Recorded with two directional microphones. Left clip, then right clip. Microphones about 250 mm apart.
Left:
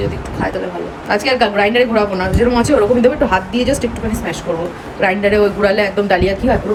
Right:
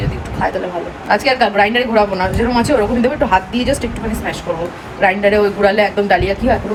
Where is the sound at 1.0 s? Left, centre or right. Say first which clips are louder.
Right 1 dB; centre.